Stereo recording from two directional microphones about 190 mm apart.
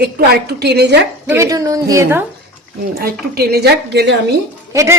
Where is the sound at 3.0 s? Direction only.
55° right (ahead or behind).